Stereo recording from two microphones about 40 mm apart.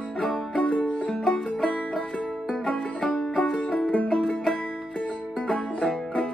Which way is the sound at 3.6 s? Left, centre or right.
Left.